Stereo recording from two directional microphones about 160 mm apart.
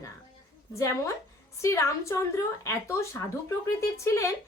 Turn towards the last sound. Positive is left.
turn(degrees=20)  # may be behind; listen again after turning